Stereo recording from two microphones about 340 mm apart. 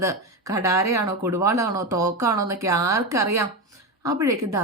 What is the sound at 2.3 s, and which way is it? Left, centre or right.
Speech, right.